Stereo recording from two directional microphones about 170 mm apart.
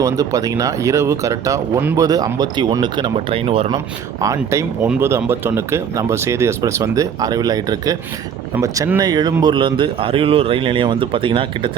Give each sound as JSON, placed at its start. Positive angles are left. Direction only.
{"t": 0.0, "sound": "speech", "side_deg": -20}
{"t": 4.2, "sound": "speech", "side_deg": -20}